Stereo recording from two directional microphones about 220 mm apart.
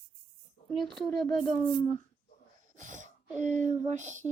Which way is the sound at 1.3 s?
35° right (ahead or behind).